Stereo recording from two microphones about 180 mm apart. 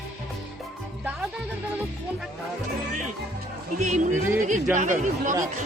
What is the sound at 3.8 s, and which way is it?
Speech, 40° right (ahead or behind).